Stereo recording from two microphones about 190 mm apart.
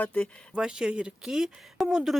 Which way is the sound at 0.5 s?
5° right (ahead or behind).